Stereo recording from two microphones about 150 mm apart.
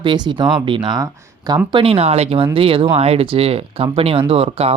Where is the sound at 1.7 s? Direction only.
40° right (ahead or behind).